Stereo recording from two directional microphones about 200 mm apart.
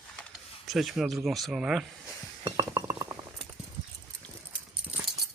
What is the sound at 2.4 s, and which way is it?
Chink, 20° right (ahead or behind).